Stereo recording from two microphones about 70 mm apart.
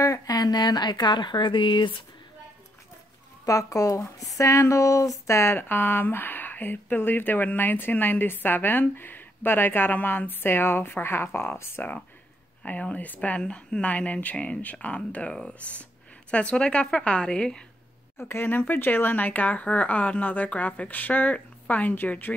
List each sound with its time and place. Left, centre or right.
0.3 s speech: left
3.4 s speech: left
12.6 s speech: left
18.1 s speech: left